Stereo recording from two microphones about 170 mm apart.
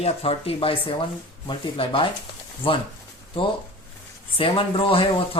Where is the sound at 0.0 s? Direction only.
35° left (ahead or behind).